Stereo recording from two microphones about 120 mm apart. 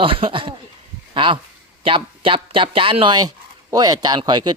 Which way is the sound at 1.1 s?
45° right (ahead or behind).